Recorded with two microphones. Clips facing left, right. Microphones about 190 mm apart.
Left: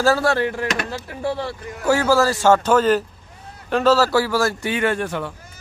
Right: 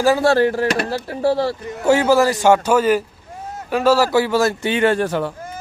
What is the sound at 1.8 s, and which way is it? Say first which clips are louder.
A man's voice: right 3 dB; 20° right (ahead or behind).